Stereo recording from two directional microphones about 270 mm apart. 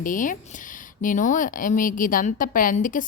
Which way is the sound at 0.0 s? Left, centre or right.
Left.